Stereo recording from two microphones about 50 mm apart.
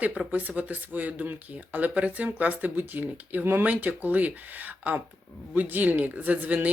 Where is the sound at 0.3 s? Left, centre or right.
Right.